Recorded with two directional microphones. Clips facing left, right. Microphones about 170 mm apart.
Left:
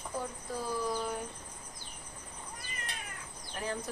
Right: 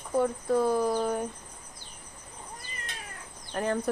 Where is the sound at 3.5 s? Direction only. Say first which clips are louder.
Right 8 dB; 55° right (ahead or behind).